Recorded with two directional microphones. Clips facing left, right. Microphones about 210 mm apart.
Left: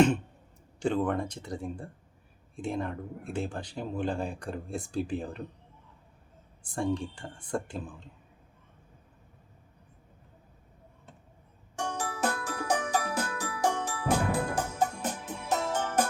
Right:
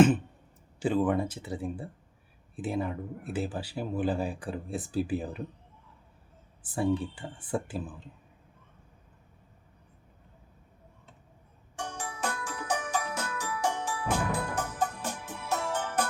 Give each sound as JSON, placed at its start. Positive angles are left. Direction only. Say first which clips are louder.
{"t": 0.8, "sound": "speech", "louder": "right 2 dB", "side_deg": -5}
{"t": 6.6, "sound": "speech", "louder": "right 2 dB", "side_deg": -5}
{"t": 11.8, "sound": "music", "louder": "left 4 dB", "side_deg": 40}
{"t": 14.5, "sound": "music", "louder": "left 2 dB", "side_deg": 20}
{"t": 15.6, "sound": "music", "louder": "left 3 dB", "side_deg": 45}